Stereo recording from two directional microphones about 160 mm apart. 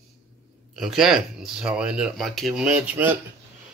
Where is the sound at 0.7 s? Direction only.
Centre (ahead or behind).